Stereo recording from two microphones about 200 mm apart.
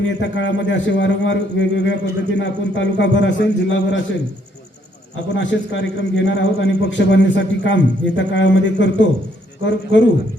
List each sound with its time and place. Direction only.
0.0 s a man's voice: 65° left (ahead or behind)
5.3 s a man's voice: 65° left (ahead or behind)